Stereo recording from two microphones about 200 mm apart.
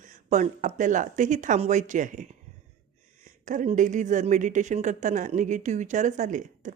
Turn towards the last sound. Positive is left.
turn(degrees=-40)  # may be behind; listen again after turning